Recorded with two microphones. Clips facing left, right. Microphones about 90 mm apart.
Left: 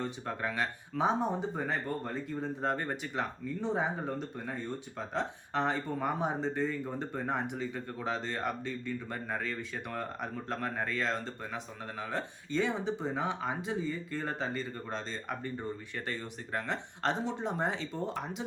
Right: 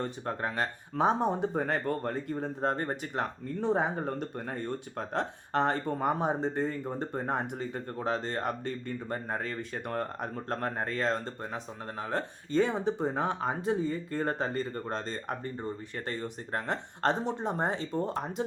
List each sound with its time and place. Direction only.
0.0 s speech: 40° right (ahead or behind); by 2.3 s 55° right (ahead or behind)
2.4 s speech: 40° right (ahead or behind)
3.4 s speech: 60° right (ahead or behind); by 18.4 s 40° right (ahead or behind)